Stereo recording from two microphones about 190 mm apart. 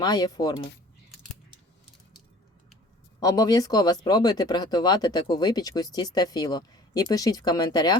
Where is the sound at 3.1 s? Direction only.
20° left (ahead or behind).